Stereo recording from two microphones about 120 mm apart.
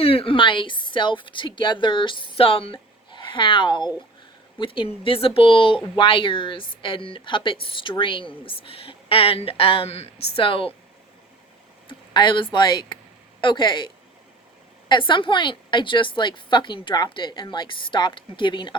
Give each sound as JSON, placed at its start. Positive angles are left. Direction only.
{"t": 0.0, "sound": "speech", "side_deg": 55}
{"t": 11.9, "sound": "speech", "side_deg": 40}